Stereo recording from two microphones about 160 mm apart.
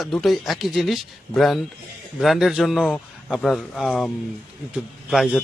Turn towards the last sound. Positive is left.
turn(degrees=0)  # may be behind; listen again after turning